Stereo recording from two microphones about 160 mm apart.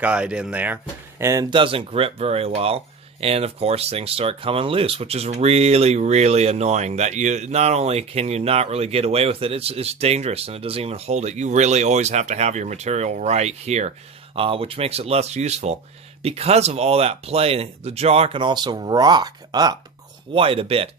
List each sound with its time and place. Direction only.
0.0 s speech: 5° right (ahead or behind)
1.2 s speech: 20° right (ahead or behind)
20.3 s speech: 35° right (ahead or behind)